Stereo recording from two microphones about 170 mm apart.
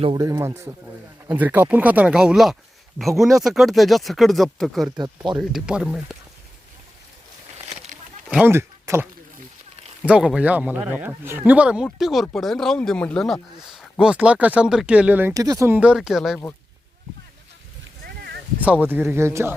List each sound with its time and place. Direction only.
0.2 s speech: 20° right (ahead or behind); by 4.9 s centre (ahead or behind)
4.9 s speech: 25° right (ahead or behind)
5.4 s speech: centre (ahead or behind)
7.7 s a sound: 45° right (ahead or behind)
8.3 s speech: 10° right (ahead or behind)
10.1 s speech: 5° right (ahead or behind)
15.3 s speech: 20° right (ahead or behind); by 16.4 s centre (ahead or behind)
18.0 s a sound: 65° right (ahead or behind)
18.6 s speech: 10° right (ahead or behind)